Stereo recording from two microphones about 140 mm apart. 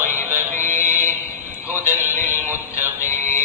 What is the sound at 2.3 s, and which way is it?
Music, 15° right (ahead or behind).